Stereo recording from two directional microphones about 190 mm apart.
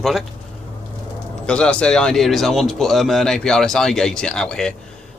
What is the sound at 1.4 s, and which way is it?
A man's voice, 5° left (ahead or behind).